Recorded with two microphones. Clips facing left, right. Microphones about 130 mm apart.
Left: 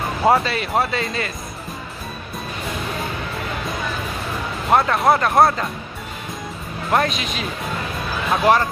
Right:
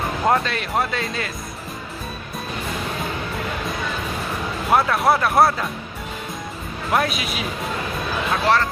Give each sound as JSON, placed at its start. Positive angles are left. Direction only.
{"t": 0.2, "sound": "speech", "side_deg": 5}
{"t": 4.6, "sound": "speech", "side_deg": 0}
{"t": 6.9, "sound": "speech", "side_deg": -5}
{"t": 8.3, "sound": "speech", "side_deg": 15}